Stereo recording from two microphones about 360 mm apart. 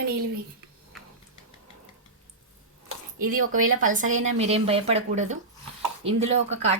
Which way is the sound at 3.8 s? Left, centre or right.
Right.